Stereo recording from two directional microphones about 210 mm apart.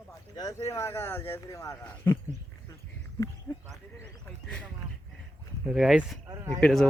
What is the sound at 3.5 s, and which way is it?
Sheep, 5° left (ahead or behind).